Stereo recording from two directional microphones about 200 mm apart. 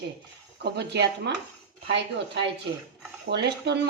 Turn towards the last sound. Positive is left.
turn(degrees=-55)  # may be behind; listen again after turning